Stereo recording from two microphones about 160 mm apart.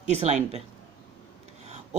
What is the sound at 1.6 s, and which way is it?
Rub, 45° right (ahead or behind).